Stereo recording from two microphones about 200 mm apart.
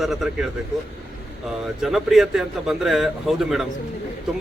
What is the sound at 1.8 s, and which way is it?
Speech, centre (ahead or behind).